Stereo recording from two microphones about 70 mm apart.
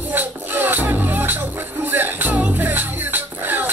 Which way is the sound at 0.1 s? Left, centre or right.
Right.